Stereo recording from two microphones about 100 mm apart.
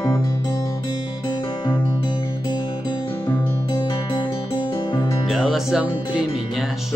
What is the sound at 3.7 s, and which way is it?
Music, 40° left (ahead or behind).